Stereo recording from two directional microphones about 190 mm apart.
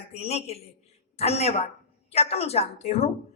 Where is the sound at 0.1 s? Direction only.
35° left (ahead or behind).